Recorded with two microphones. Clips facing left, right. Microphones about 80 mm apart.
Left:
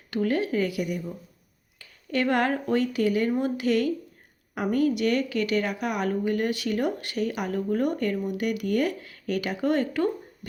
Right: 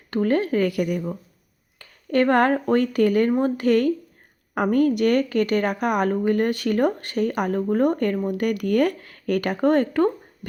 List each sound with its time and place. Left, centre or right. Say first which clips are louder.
0.1 s speech: right 4 dB; right